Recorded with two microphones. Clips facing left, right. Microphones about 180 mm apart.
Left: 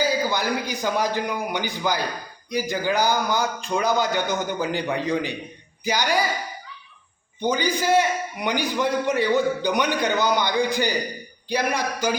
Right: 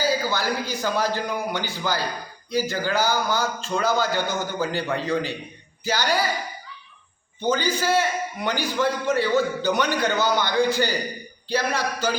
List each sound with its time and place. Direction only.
0.0 s a man's voice: 15° left (ahead or behind)
7.4 s a man's voice: 15° left (ahead or behind)